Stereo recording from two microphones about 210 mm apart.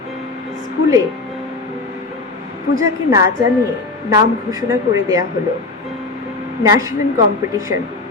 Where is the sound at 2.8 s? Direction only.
15° right (ahead or behind).